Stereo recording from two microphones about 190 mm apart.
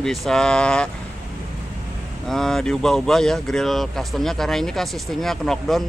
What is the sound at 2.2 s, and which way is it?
Speech, centre (ahead or behind).